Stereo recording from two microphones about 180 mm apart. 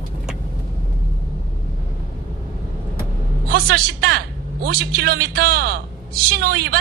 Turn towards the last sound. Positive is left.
turn(degrees=-60)  # may be behind; listen again after turning